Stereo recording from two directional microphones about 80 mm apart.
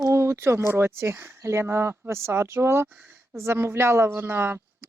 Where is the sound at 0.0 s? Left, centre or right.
Right.